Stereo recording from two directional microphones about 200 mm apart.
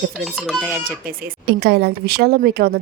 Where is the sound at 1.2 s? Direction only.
55° right (ahead or behind).